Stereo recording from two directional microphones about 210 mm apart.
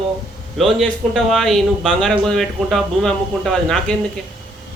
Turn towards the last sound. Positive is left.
turn(degrees=0)  # may be behind; listen again after turning